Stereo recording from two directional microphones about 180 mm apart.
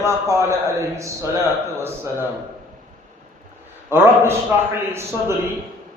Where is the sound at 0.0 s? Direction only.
15° right (ahead or behind).